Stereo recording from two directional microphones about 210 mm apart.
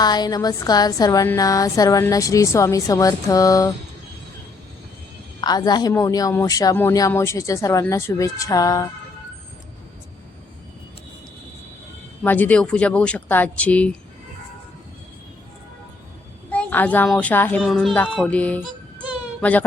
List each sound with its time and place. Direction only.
0.0 s a woman's voice: 20° left (ahead or behind)
5.4 s a woman's voice: 20° left (ahead or behind)
12.2 s a woman's voice: 10° left (ahead or behind)
16.5 s a woman's voice: 5° left (ahead or behind)